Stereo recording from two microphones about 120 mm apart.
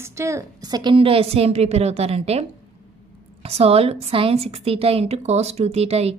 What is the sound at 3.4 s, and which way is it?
A woman's voice, 55° right (ahead or behind).